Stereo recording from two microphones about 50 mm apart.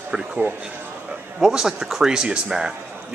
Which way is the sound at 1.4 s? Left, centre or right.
Centre.